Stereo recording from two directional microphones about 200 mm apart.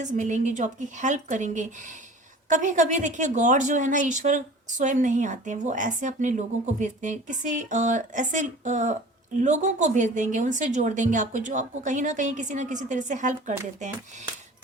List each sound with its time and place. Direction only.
0.0 s a woman's voice: 40° right (ahead or behind)